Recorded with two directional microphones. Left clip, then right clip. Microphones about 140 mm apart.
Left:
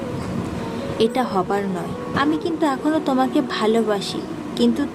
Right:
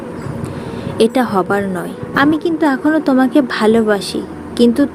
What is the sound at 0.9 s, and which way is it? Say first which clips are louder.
A woman's voice: right 6 dB; 30° right (ahead or behind).